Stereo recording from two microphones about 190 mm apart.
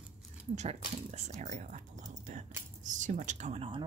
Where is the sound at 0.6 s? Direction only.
35° right (ahead or behind).